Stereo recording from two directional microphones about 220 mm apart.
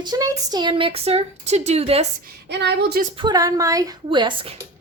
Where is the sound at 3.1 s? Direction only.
20° right (ahead or behind).